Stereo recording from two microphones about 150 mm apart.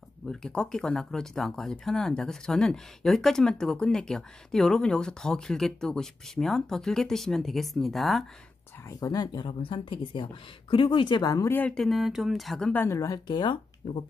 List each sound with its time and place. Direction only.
0.3 s speech: 5° left (ahead or behind)
8.8 s speech: 25° left (ahead or behind)
11.5 s speech: 5° left (ahead or behind); by 14.0 s 30° left (ahead or behind)